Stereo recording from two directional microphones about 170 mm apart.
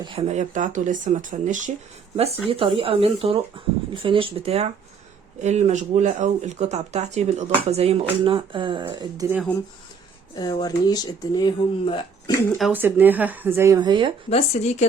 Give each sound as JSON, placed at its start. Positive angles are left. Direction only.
{"t": 0.0, "sound": "speech", "side_deg": -30}
{"t": 0.3, "sound": "speech", "side_deg": -45}
{"t": 2.5, "sound": "speech", "side_deg": -30}
{"t": 10.3, "sound": "speech", "side_deg": 25}
{"t": 12.5, "sound": "speech", "side_deg": -5}
{"t": 14.3, "sound": "a woman's voice", "side_deg": 40}